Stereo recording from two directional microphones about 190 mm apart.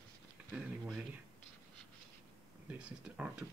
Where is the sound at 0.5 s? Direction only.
5° right (ahead or behind).